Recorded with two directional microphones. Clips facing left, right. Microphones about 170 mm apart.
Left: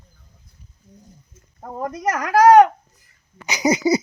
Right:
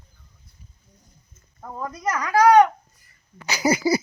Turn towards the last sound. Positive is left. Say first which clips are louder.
# left 3 dB
turn(degrees=20)  # may be behind; listen again after turning